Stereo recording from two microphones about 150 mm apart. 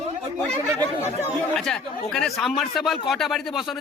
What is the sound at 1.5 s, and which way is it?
Speech, 5° left (ahead or behind).